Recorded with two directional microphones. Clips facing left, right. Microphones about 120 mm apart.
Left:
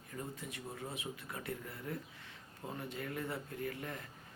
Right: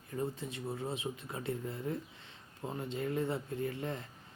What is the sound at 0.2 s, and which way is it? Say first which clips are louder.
Speech: right 7 dB; 25° right (ahead or behind).